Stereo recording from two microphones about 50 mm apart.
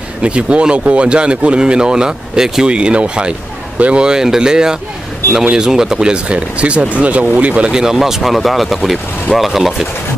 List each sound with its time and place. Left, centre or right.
0.2 s speech: right
2.7 s speech: right
7.7 s speech: centre